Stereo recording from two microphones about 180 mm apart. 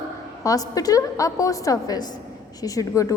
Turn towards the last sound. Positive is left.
turn(degrees=20)  # may be behind; listen again after turning